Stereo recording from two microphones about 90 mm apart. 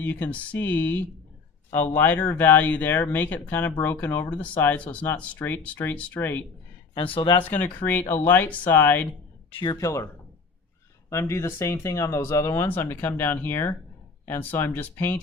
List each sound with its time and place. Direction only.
0.0 s speech: 20° left (ahead or behind)
6.9 s speech: 75° left (ahead or behind)
8.1 s speech: 20° left (ahead or behind)
9.5 s speech: 65° left (ahead or behind)
9.7 s speech: 35° left (ahead or behind)
11.1 s speech: 35° left (ahead or behind)
12.6 s speech: 25° left (ahead or behind)